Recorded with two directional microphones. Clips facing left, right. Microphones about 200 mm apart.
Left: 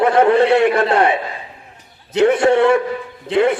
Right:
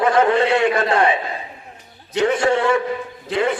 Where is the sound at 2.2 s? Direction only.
60° left (ahead or behind).